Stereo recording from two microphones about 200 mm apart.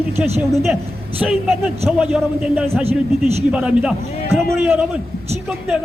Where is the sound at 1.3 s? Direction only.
Centre (ahead or behind).